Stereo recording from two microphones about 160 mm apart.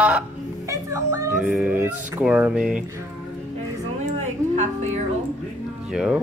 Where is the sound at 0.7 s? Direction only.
20° right (ahead or behind).